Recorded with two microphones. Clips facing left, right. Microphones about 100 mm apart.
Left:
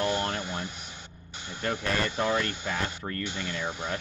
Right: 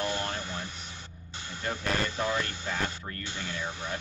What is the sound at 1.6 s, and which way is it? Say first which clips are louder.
Speech: left 2 dB; 65° left (ahead or behind).